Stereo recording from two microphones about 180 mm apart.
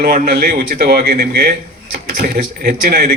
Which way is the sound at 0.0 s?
55° right (ahead or behind).